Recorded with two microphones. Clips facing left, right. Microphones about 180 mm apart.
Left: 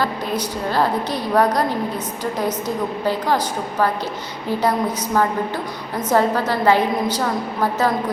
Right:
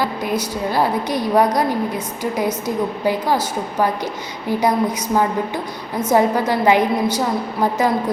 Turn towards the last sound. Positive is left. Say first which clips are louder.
# right 1 dB
turn(degrees=-15)  # may be behind; listen again after turning